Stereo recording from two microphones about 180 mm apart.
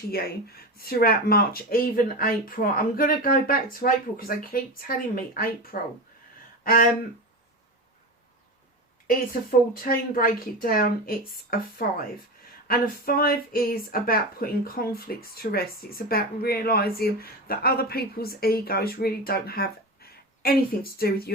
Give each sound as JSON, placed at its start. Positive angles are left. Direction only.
{"t": 0.1, "sound": "speech", "side_deg": 55}
{"t": 9.0, "sound": "speech", "side_deg": 50}